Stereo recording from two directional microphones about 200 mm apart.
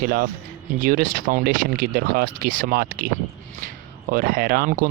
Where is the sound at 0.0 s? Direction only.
45° right (ahead or behind).